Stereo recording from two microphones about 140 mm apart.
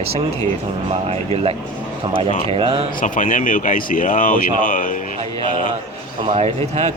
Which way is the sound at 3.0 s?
65° left (ahead or behind).